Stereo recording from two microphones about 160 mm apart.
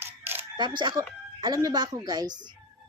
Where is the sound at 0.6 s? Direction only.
30° right (ahead or behind).